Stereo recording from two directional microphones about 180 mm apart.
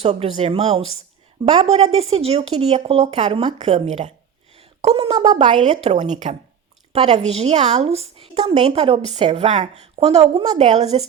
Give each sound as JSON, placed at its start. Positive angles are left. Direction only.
{"t": 0.0, "sound": "speech", "side_deg": -35}